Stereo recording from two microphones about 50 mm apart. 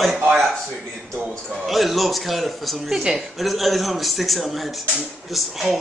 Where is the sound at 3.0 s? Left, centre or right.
Centre.